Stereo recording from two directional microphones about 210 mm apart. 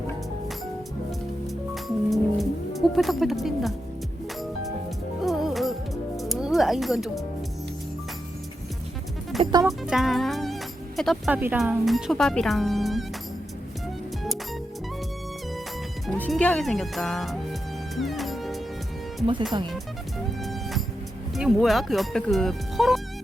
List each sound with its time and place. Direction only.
1.7 s music: centre (ahead or behind)
5.2 s music: centre (ahead or behind)
9.4 s music: 20° right (ahead or behind)
9.8 s speech: centre (ahead or behind)
16.0 s speech: 5° left (ahead or behind)
17.9 s music: centre (ahead or behind)
20.4 s music: centre (ahead or behind)
21.3 s speech: centre (ahead or behind)